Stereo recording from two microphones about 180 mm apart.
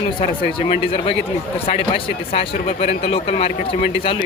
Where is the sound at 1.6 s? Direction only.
30° left (ahead or behind).